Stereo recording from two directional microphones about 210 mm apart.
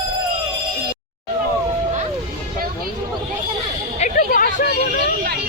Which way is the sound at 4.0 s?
40° left (ahead or behind).